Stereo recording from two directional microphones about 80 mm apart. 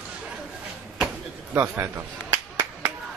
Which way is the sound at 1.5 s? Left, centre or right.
Right.